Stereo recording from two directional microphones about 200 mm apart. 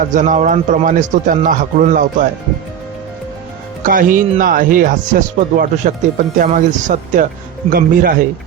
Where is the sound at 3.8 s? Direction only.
40° right (ahead or behind).